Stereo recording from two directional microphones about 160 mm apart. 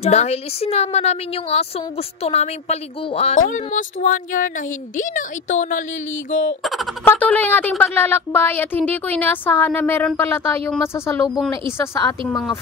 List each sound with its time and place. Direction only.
0.0 s a woman's voice: 40° left (ahead or behind)
6.6 s a woman's voice: centre (ahead or behind)
7.1 s speech: 10° left (ahead or behind)
11.3 s a woman's voice: centre (ahead or behind)
11.8 s speech: 15° left (ahead or behind)